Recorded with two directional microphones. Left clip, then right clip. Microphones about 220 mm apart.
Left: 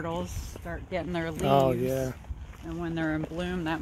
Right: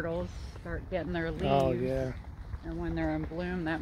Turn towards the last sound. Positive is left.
turn(degrees=55)  # may be behind; listen again after turning